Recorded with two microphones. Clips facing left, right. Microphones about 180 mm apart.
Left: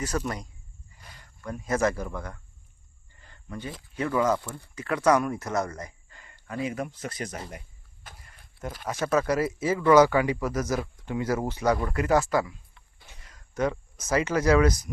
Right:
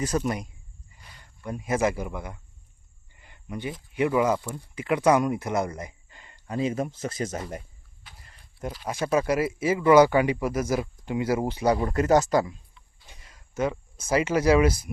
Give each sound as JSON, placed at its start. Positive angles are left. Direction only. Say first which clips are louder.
{"t": 0.0, "sound": "speech", "louder": "right 4 dB", "side_deg": -15}
{"t": 3.2, "sound": "cricket", "louder": "right 3 dB", "side_deg": -15}
{"t": 3.9, "sound": "speech", "louder": "right 2 dB", "side_deg": -15}
{"t": 8.1, "sound": "a sound", "louder": "left 4 dB", "side_deg": 45}
{"t": 8.9, "sound": "speech", "louder": "right 1 dB", "side_deg": -10}
{"t": 11.8, "sound": "speech", "louder": "right 3 dB", "side_deg": -40}
{"t": 12.8, "sound": "a sound", "louder": "right 2 dB", "side_deg": 55}
{"t": 14.3, "sound": "speech", "louder": "right 1 dB", "side_deg": -10}